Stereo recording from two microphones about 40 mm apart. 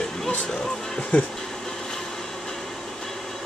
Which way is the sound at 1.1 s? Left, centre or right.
Left.